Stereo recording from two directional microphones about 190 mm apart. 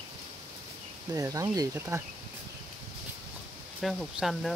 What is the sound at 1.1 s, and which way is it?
Speech, 15° right (ahead or behind).